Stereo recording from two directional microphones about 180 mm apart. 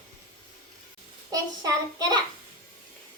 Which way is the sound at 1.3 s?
20° right (ahead or behind).